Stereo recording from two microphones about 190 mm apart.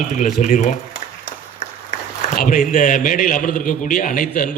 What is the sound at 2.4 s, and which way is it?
A man's voice, 45° left (ahead or behind).